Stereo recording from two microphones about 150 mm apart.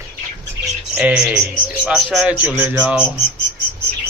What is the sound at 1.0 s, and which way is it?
Speech, 10° right (ahead or behind).